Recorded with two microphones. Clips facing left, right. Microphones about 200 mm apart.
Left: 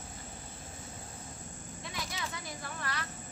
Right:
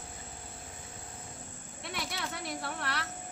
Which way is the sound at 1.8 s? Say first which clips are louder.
Right 3 dB; 70° right (ahead or behind).